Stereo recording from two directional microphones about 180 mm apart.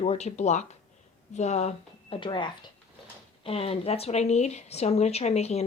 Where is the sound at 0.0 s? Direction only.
40° left (ahead or behind).